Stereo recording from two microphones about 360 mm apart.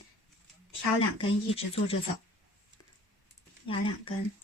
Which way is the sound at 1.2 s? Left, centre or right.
Centre.